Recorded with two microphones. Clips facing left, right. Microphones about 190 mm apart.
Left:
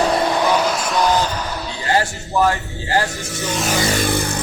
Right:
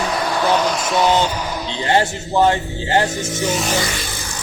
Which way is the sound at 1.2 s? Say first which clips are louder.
Right 1 dB; 10° right (ahead or behind).